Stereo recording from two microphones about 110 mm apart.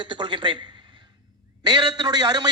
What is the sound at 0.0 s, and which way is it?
Speech, 45° right (ahead or behind).